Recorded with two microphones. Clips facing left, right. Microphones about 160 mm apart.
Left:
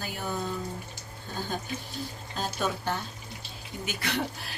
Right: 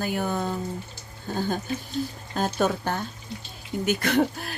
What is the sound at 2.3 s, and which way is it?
Speech, 50° right (ahead or behind).